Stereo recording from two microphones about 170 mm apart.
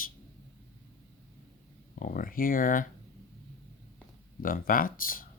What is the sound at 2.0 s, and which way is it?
Speech, 55° left (ahead or behind).